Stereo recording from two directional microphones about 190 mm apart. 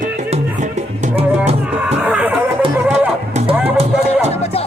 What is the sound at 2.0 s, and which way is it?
Music, 5° right (ahead or behind).